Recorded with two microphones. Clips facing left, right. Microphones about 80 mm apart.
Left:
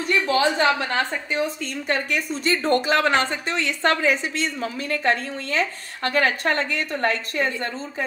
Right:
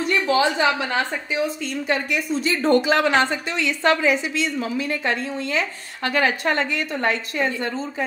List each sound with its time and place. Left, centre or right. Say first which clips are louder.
0.3 s speech: right 1 dB; left